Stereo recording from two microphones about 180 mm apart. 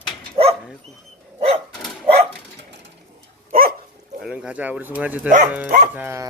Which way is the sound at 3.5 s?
55° right (ahead or behind).